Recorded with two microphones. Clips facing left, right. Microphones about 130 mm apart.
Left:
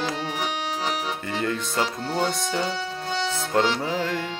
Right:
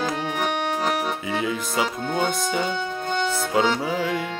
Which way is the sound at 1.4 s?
5° right (ahead or behind).